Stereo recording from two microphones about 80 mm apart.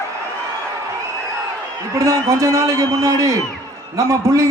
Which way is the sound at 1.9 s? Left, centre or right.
Right.